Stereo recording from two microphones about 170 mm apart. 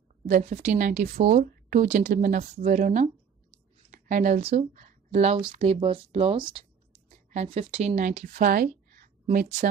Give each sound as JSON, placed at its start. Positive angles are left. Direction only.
{"t": 0.3, "sound": "a woman's voice", "side_deg": -45}